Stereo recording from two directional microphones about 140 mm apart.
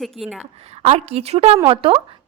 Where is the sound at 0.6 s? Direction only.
50° right (ahead or behind).